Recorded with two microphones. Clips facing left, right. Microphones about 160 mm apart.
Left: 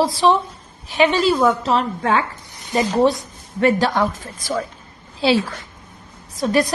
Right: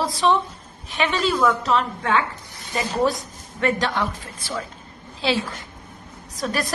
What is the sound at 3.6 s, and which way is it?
Speech, 40° left (ahead or behind).